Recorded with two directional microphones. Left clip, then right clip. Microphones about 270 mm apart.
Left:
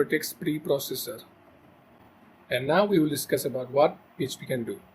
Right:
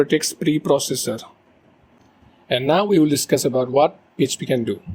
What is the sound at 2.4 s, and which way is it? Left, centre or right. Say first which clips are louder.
Speech: right 6 dB; right.